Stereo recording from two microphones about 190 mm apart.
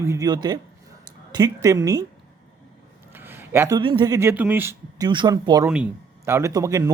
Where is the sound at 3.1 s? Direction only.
10° right (ahead or behind).